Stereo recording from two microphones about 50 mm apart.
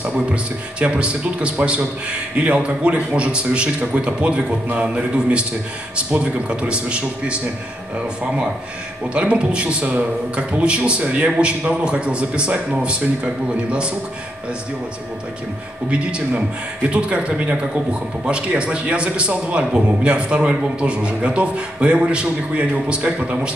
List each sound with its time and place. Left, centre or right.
0.3 s a man's voice: right
9.1 s a man's voice: right
15.9 s a man's voice: right